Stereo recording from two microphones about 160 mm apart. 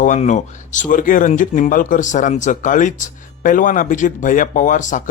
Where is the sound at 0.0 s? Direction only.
50° left (ahead or behind).